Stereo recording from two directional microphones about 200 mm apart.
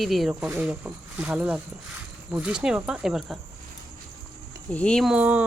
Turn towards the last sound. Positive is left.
turn(degrees=-5)  # may be behind; listen again after turning